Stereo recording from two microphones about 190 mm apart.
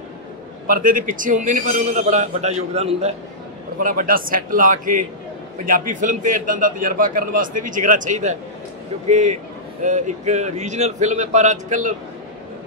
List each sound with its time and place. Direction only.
0.7 s a man's voice: 45° right (ahead or behind)
3.8 s a man's voice: 45° right (ahead or behind)